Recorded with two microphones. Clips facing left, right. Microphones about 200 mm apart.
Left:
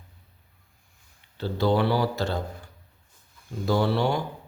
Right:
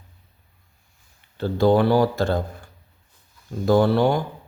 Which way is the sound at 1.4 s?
50° right (ahead or behind).